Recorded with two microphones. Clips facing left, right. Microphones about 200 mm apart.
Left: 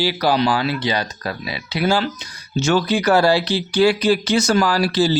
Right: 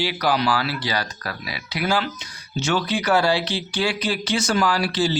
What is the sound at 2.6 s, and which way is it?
Speech, 40° left (ahead or behind).